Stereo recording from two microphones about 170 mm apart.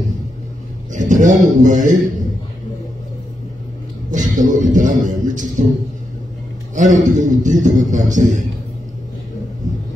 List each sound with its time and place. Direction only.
0.9 s a man's voice: 50° right (ahead or behind)
4.1 s speech: 50° right (ahead or behind)
6.7 s a man's voice: 45° right (ahead or behind)